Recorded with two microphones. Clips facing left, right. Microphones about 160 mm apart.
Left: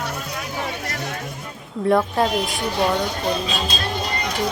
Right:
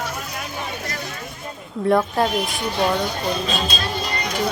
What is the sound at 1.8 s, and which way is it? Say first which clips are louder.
Speech: even; centre (ahead or behind).